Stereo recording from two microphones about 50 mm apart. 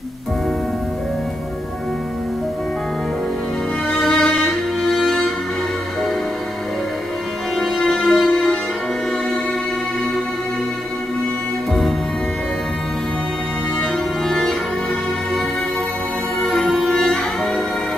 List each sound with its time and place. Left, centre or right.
4.1 s music: centre
4.8 s music: centre
7.5 s music: centre
13.7 s music: centre
16.3 s music: centre